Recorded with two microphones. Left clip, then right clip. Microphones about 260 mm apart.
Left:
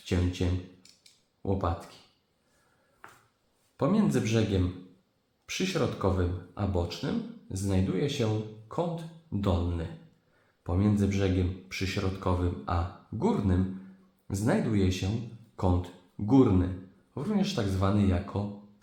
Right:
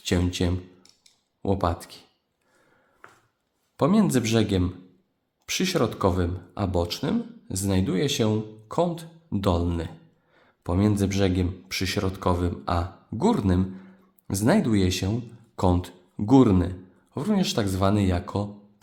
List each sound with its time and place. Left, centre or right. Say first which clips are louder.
0.0 s speech: right 6 dB; right
3.8 s speech: right 5 dB; right